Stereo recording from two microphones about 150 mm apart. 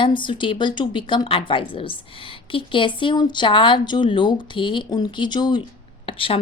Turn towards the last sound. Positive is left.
turn(degrees=35)  # may be behind; listen again after turning